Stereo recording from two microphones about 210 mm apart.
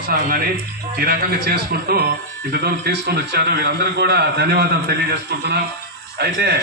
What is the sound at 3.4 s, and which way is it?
A man's voice, 50° right (ahead or behind).